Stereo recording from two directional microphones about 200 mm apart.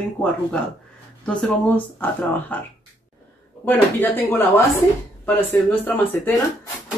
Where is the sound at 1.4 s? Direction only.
10° left (ahead or behind).